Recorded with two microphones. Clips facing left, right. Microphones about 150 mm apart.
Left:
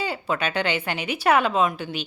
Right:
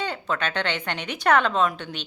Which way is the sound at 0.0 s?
10° left (ahead or behind).